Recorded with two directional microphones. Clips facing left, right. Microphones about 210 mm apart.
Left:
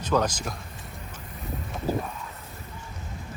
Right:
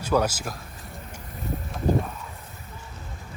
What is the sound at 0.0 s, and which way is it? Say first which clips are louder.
Speech: right 1 dB; 10° right (ahead or behind).